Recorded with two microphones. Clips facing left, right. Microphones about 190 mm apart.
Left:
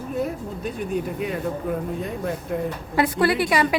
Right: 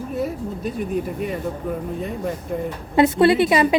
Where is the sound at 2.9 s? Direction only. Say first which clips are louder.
Right 6 dB; 25° right (ahead or behind).